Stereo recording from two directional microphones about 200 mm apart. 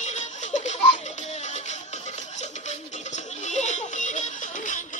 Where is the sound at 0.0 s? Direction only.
35° left (ahead or behind).